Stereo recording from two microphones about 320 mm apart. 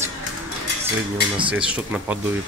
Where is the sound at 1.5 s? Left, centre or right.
Centre.